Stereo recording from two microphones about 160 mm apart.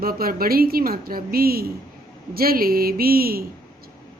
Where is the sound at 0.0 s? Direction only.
70° right (ahead or behind).